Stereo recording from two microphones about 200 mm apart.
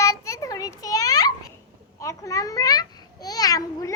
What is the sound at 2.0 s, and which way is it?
A child's voice, 15° left (ahead or behind).